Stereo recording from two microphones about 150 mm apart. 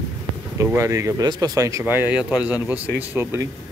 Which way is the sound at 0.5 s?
15° right (ahead or behind).